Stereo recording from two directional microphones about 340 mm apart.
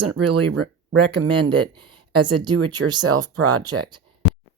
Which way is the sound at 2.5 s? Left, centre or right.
Right.